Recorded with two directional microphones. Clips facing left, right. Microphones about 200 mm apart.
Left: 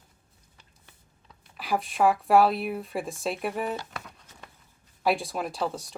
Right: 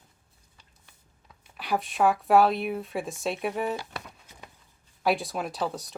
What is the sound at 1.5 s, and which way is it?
Speech, centre (ahead or behind).